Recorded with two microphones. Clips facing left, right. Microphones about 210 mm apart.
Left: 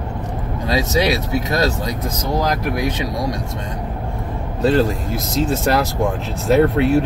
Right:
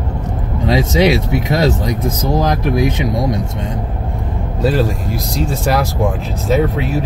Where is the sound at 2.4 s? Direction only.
25° right (ahead or behind).